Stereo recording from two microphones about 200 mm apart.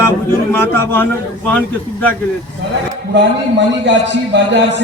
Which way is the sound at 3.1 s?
60° right (ahead or behind).